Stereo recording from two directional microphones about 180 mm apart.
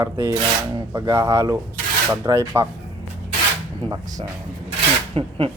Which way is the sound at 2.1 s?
15° right (ahead or behind).